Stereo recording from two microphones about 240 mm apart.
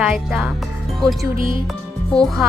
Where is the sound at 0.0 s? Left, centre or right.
Centre.